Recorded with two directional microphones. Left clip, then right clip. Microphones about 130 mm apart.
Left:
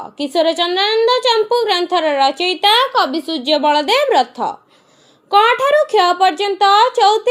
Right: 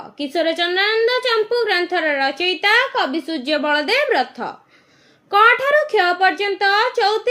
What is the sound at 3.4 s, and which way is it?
A woman's voice, 20° left (ahead or behind).